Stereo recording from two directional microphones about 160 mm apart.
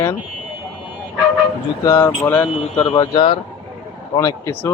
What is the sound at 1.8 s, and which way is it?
Speech, 15° left (ahead or behind).